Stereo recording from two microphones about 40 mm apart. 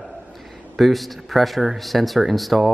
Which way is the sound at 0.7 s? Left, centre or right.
Centre.